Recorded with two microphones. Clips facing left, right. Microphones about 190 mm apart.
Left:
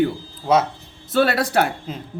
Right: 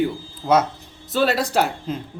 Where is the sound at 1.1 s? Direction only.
55° left (ahead or behind).